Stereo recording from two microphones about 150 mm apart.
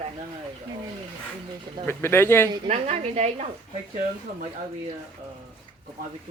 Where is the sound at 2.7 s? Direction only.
50° right (ahead or behind).